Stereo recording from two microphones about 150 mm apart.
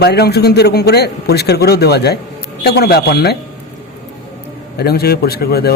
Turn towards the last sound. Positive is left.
turn(degrees=90)